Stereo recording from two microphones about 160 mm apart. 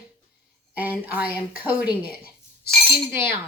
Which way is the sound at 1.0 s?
10° right (ahead or behind).